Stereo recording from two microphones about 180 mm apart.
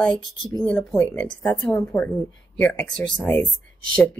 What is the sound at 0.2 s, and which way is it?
Speech, 25° left (ahead or behind).